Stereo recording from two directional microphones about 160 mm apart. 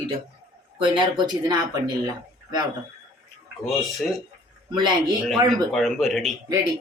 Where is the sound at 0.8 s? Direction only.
30° right (ahead or behind).